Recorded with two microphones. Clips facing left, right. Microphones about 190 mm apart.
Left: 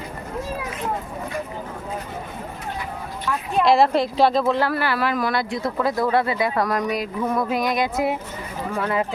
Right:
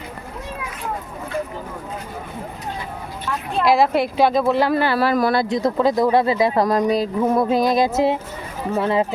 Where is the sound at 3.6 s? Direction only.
Centre (ahead or behind); by 5.4 s 35° right (ahead or behind).